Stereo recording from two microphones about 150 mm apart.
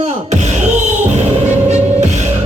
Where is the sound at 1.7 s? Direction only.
50° right (ahead or behind).